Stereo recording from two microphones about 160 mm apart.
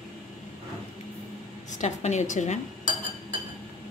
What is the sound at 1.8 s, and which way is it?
Speech, 45° left (ahead or behind).